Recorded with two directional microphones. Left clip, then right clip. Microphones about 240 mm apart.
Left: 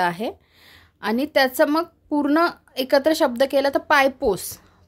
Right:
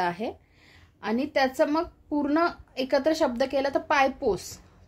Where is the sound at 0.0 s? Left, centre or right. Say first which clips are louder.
Left 6 dB; left.